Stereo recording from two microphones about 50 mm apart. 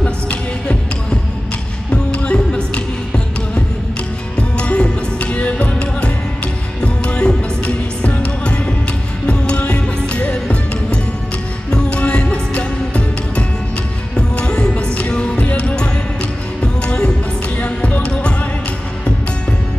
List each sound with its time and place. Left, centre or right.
0.0 s music: left
1.9 s music: left